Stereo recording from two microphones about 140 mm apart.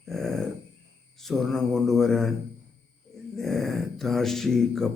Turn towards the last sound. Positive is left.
turn(degrees=5)  # may be behind; listen again after turning